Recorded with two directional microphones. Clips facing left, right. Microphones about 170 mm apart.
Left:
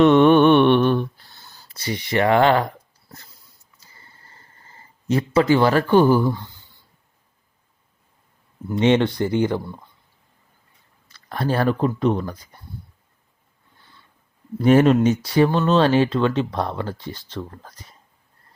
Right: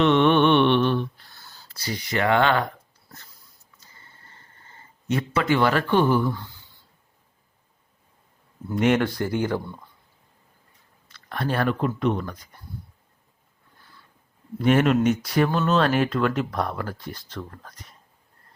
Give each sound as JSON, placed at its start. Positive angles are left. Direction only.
{"t": 0.0, "sound": "mantra", "side_deg": 45}
{"t": 1.4, "sound": "speech", "side_deg": 20}
{"t": 4.3, "sound": "a sound", "side_deg": 35}
{"t": 8.7, "sound": "speech", "side_deg": 25}
{"t": 11.1, "sound": "speech", "side_deg": 35}
{"t": 14.6, "sound": "speech", "side_deg": 35}